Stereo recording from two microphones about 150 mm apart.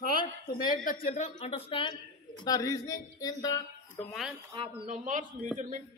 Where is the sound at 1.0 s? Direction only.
55° left (ahead or behind); by 4.0 s 25° left (ahead or behind).